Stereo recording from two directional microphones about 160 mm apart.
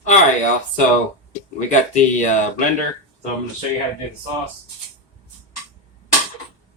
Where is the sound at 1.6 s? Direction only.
50° left (ahead or behind).